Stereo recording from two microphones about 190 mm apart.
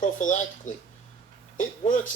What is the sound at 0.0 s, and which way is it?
Speech, 40° left (ahead or behind).